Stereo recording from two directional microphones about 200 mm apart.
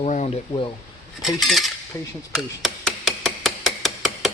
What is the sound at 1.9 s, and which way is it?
Speech, 15° left (ahead or behind).